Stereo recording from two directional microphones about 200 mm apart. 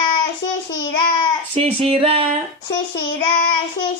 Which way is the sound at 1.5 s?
30° right (ahead or behind).